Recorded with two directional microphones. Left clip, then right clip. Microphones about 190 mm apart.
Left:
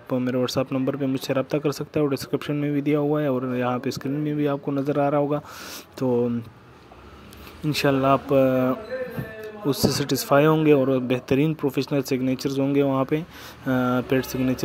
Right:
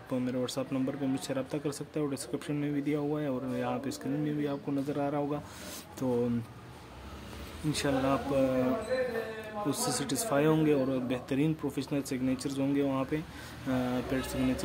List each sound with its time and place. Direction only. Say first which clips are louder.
0.1 s speech: left 9 dB; 35° left (ahead or behind)
7.7 s speech: left 10 dB; 40° left (ahead or behind)
9.7 s speech: left 11 dB; 35° left (ahead or behind)